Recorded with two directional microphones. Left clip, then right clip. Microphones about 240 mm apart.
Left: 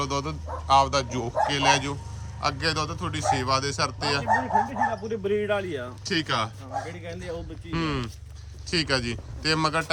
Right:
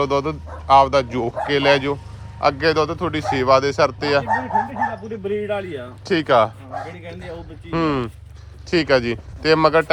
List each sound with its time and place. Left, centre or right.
0.0 s speech: centre
4.4 s speech: left
5.0 s speech: centre
6.1 s speech: centre
7.1 s speech: centre
7.3 s speech: centre